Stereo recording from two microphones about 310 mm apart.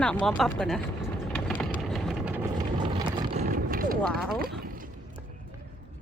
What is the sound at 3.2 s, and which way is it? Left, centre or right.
Vehicle, right.